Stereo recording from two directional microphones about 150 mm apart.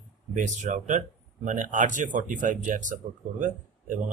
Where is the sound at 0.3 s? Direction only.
55° right (ahead or behind).